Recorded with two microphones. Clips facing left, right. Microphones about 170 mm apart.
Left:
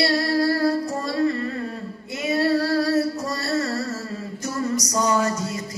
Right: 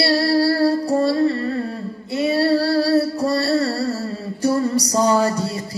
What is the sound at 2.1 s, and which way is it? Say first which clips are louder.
Music: right 4 dB; 35° right (ahead or behind).